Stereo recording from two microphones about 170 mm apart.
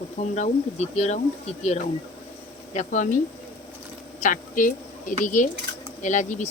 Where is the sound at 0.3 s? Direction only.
40° left (ahead or behind).